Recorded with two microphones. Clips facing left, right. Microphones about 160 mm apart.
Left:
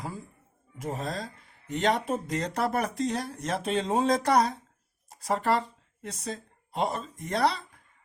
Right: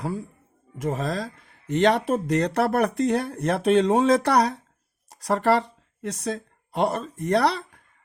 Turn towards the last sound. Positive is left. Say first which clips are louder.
# right 5 dB
turn(degrees=-70)  # may be behind; listen again after turning